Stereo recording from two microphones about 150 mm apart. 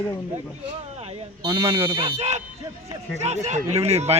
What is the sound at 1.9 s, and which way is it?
Speech, 30° right (ahead or behind).